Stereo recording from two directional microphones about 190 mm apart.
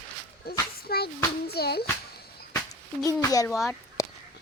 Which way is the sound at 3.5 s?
Centre (ahead or behind).